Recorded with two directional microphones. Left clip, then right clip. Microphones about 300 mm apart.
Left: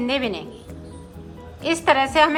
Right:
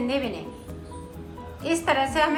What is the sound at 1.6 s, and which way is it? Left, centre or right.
Speech, centre.